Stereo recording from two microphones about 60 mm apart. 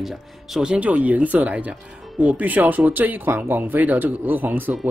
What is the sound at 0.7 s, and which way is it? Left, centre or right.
Speech, right.